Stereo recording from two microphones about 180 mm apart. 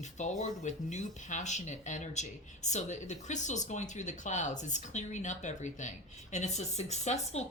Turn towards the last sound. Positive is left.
turn(degrees=40)  # may be behind; listen again after turning